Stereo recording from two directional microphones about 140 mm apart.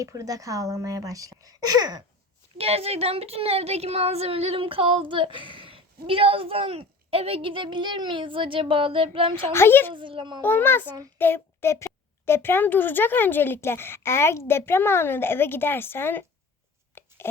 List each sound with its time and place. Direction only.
0.0 s a woman's voice: 25° right (ahead or behind)
2.6 s a woman's voice: 45° right (ahead or behind)
9.5 s speech: 15° left (ahead or behind)
9.9 s speech: 35° right (ahead or behind)
10.4 s speech: 15° left (ahead or behind)
11.2 s a sound: 15° left (ahead or behind)
12.2 s speech: 15° left (ahead or behind)
17.0 s a sound: 15° left (ahead or behind)